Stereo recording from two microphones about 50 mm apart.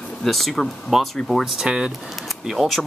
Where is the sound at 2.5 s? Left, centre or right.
Centre.